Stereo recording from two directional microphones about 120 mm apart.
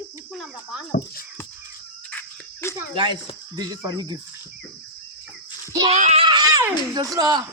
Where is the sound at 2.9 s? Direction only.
45° right (ahead or behind).